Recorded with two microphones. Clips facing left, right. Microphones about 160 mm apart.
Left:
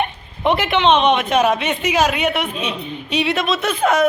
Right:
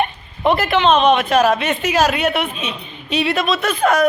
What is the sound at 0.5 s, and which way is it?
Speech, centre (ahead or behind).